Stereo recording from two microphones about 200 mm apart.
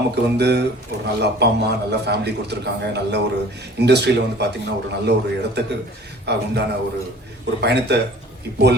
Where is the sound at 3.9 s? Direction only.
55° right (ahead or behind).